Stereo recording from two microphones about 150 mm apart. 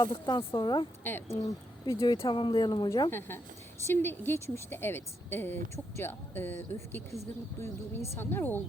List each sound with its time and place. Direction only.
0.0 s speech: 30° left (ahead or behind)
1.0 s a woman's voice: 15° left (ahead or behind)
3.1 s a woman's voice: 15° left (ahead or behind)